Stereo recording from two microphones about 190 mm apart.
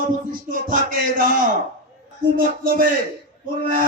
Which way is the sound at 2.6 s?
50° right (ahead or behind).